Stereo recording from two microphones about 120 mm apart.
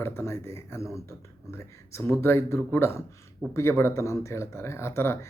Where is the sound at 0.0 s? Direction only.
20° left (ahead or behind).